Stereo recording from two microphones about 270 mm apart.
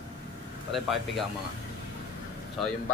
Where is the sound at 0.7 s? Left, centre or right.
Centre.